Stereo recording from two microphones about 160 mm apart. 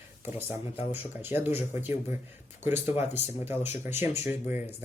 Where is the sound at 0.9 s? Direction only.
15° right (ahead or behind).